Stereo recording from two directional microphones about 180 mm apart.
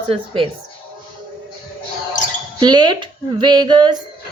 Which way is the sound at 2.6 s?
25° right (ahead or behind).